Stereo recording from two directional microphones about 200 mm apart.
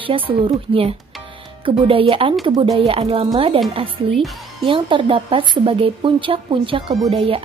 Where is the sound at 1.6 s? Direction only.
25° right (ahead or behind).